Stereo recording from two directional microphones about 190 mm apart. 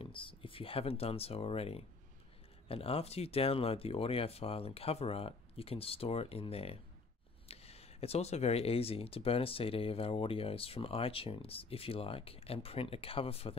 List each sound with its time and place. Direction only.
0.0 s speech: 25° left (ahead or behind)